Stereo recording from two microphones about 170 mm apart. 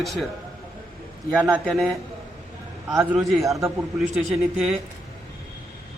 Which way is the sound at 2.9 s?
15° right (ahead or behind).